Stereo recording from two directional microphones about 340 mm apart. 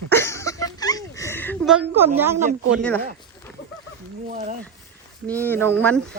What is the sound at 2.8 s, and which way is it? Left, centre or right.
Speech, centre.